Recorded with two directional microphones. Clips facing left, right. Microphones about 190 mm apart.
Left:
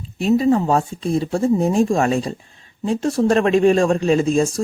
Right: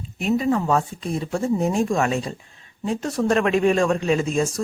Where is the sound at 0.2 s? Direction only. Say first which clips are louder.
Left 5 dB; 35° left (ahead or behind).